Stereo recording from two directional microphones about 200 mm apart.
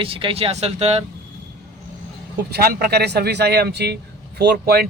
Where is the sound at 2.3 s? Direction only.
50° right (ahead or behind).